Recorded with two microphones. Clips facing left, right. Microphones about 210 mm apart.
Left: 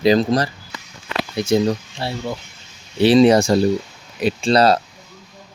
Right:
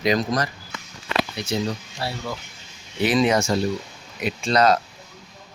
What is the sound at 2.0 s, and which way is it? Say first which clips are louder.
Speech: left 4 dB; 25° left (ahead or behind).